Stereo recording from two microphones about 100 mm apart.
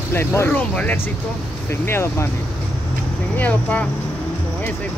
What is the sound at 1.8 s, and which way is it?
Speech, 25° left (ahead or behind).